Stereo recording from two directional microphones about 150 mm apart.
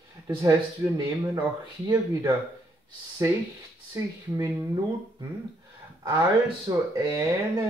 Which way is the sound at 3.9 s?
20° right (ahead or behind).